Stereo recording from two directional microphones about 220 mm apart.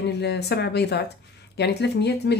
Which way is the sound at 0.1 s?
50° left (ahead or behind).